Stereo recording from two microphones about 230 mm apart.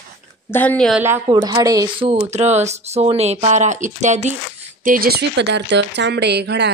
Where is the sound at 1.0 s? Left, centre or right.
Centre.